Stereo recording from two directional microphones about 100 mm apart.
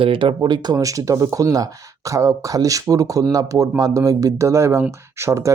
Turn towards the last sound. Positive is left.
turn(degrees=-30)  # may be behind; listen again after turning